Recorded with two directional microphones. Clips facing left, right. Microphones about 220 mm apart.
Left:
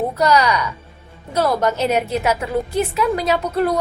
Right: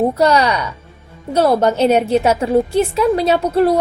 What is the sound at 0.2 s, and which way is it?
A woman's voice, 30° right (ahead or behind).